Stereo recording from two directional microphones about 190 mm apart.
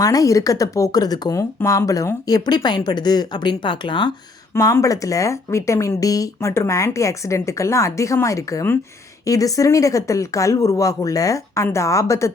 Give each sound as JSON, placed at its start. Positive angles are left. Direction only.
{"t": 0.0, "sound": "speech", "side_deg": 20}